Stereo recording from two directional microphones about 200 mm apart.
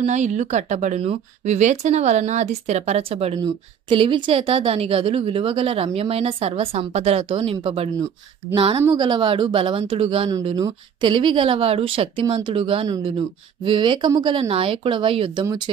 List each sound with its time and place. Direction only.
0.0 s a woman's voice: 35° right (ahead or behind); by 15.7 s 20° right (ahead or behind)